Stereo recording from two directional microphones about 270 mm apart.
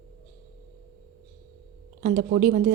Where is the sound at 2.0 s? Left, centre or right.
Right.